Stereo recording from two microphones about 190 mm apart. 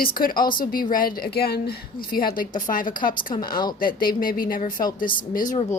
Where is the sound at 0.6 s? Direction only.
45° left (ahead or behind).